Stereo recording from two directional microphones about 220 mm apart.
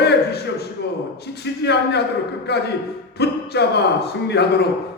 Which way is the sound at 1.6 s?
50° left (ahead or behind).